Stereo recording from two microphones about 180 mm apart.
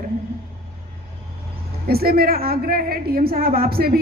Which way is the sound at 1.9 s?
60° right (ahead or behind).